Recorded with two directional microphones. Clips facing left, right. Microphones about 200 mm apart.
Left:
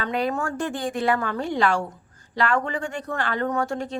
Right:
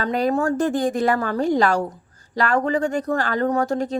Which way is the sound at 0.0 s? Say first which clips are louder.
Right 5 dB; 40° right (ahead or behind).